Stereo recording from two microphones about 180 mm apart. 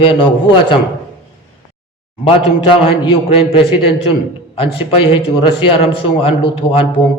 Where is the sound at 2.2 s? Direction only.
30° left (ahead or behind).